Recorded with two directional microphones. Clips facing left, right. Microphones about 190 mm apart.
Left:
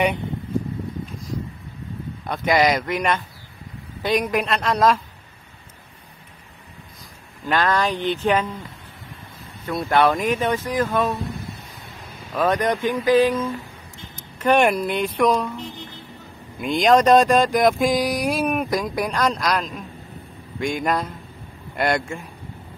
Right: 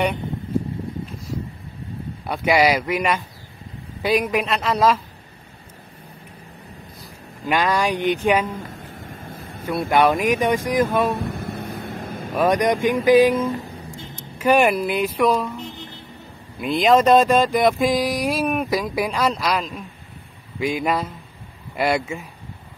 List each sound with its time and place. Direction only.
2.2 s speech: 10° right (ahead or behind)
7.4 s speech: 10° right (ahead or behind)
9.2 s vehicle: 50° right (ahead or behind)
9.7 s speech: 10° right (ahead or behind)
11.1 s a sound: 60° right (ahead or behind)
12.4 s speech: 15° right (ahead or behind)
13.5 s a woman's voice: 40° right (ahead or behind)
14.4 s speech: 5° right (ahead or behind)
16.5 s speech: centre (ahead or behind)